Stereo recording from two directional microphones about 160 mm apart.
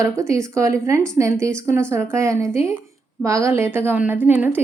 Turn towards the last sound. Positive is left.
turn(degrees=-10)  # may be behind; listen again after turning